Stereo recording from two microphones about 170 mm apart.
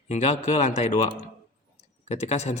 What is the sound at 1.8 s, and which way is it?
Tick-tock, 40° left (ahead or behind).